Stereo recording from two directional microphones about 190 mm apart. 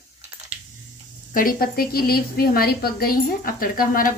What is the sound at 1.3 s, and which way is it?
A woman's voice, 50° left (ahead or behind).